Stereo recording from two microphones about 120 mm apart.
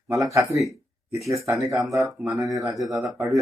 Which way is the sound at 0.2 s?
25° right (ahead or behind).